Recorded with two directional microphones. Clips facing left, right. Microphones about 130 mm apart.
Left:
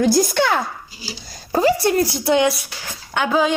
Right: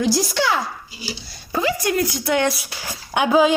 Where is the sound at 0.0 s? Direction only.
50° left (ahead or behind).